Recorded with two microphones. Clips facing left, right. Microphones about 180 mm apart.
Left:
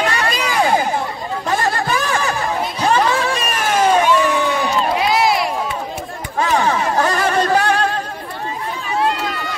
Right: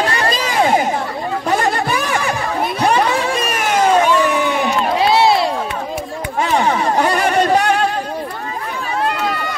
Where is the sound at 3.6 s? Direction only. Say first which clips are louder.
Even; 20° right (ahead or behind).